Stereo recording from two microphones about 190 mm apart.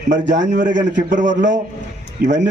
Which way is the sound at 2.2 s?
70° right (ahead or behind).